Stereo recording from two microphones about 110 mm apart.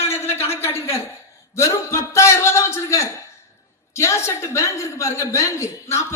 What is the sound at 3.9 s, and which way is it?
A woman's voice, 25° left (ahead or behind).